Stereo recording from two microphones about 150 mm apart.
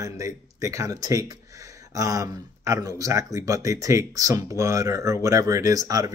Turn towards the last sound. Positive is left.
turn(degrees=-25)  # may be behind; listen again after turning